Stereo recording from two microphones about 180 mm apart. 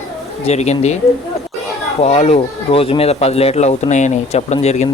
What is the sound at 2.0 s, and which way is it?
Speech, 35° left (ahead or behind).